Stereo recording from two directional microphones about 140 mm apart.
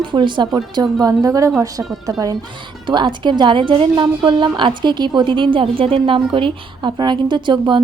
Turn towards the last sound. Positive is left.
turn(degrees=-35)  # may be behind; listen again after turning